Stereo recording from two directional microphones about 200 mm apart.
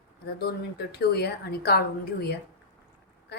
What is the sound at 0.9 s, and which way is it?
A woman's voice, 55° left (ahead or behind).